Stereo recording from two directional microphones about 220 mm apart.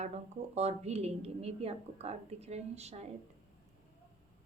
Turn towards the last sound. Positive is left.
turn(degrees=-30)  # may be behind; listen again after turning